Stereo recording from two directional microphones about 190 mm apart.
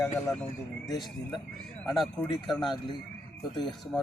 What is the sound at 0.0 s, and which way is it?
Speech, 10° left (ahead or behind).